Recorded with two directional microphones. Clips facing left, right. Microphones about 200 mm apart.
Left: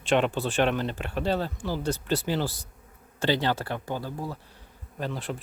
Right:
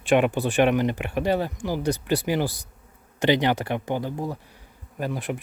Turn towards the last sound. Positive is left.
turn(degrees=-15)  # may be behind; listen again after turning